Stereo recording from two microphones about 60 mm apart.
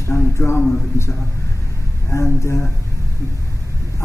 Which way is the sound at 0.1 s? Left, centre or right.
Left.